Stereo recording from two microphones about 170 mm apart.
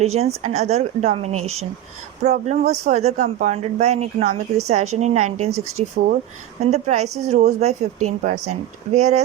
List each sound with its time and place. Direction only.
0.0 s speech: 40° right (ahead or behind)